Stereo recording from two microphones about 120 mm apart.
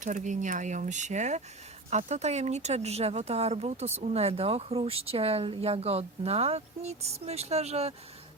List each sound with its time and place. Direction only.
0.0 s speech: 90° right
1.9 s speech: 70° right (ahead or behind)